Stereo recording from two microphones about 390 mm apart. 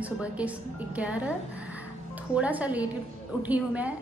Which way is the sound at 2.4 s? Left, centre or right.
Centre.